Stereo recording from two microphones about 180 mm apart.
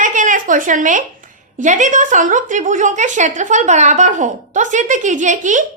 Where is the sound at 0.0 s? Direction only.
45° right (ahead or behind).